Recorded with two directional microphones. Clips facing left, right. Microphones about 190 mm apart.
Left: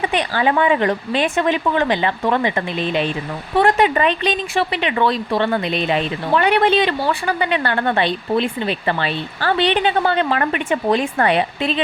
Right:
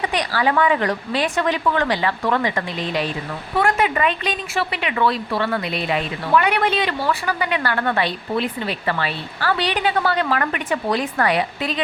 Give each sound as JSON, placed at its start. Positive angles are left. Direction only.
{"t": 0.1, "sound": "speech", "side_deg": 20}
{"t": 3.6, "sound": "speech", "side_deg": 35}